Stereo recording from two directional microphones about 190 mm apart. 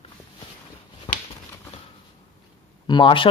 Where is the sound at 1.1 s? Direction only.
30° left (ahead or behind).